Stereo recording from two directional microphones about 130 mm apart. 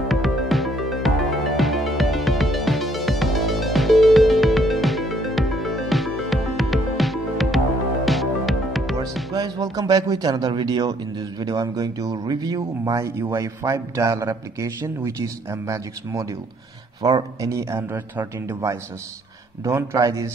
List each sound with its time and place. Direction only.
0.1 s music: centre (ahead or behind)
9.3 s speech: 30° right (ahead or behind)